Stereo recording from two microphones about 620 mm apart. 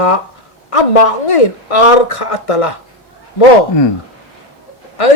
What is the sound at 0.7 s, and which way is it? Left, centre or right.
Speech, left.